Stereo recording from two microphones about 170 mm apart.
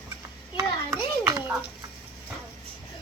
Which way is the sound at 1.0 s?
15° right (ahead or behind).